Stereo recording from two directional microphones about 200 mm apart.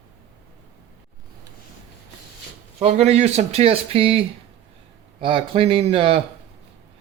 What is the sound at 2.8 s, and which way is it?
Speech, 35° right (ahead or behind).